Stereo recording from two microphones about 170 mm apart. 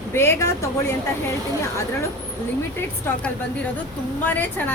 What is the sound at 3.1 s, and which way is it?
Speech, 10° left (ahead or behind).